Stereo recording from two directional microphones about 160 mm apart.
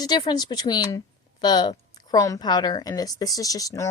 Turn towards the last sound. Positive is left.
turn(degrees=20)  # may be behind; listen again after turning